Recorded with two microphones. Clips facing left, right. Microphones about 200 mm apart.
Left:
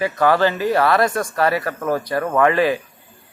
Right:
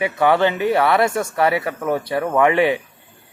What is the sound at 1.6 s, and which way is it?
Speech, 5° right (ahead or behind).